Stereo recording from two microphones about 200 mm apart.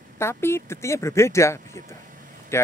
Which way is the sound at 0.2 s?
10° left (ahead or behind).